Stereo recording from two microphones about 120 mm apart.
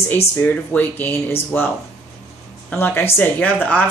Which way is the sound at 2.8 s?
15° left (ahead or behind).